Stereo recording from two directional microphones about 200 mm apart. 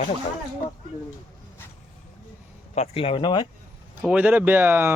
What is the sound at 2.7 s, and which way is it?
Speech, 30° left (ahead or behind).